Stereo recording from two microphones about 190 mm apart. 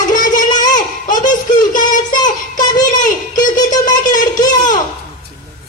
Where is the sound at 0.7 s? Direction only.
45° left (ahead or behind).